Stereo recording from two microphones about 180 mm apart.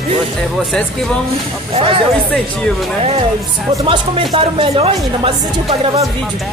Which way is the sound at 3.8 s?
30° right (ahead or behind).